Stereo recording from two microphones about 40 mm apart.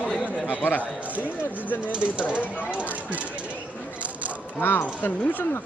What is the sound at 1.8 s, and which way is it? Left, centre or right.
Speech, right.